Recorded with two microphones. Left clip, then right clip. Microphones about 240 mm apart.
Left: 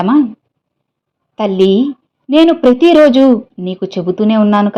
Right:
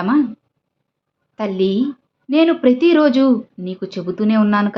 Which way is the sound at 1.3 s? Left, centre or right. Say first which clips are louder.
Left 8 dB; left.